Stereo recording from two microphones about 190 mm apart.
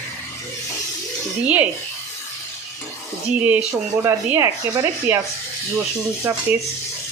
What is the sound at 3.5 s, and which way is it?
Speech, 10° right (ahead or behind).